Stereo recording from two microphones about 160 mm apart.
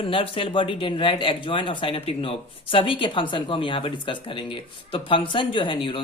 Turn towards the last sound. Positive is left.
turn(degrees=30)  # may be behind; listen again after turning